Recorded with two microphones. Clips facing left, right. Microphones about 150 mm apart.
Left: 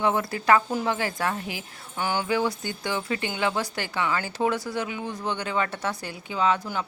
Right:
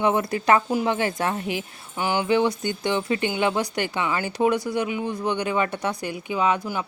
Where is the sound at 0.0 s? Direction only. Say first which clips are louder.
Right 3 dB; 20° right (ahead or behind).